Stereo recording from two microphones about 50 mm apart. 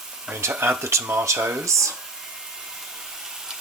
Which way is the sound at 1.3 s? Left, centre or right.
Right.